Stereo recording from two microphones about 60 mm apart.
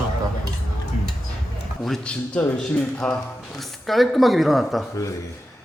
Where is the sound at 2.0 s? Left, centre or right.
Centre.